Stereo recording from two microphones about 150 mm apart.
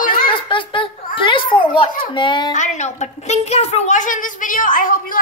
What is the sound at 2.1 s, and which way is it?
Speech, 30° left (ahead or behind).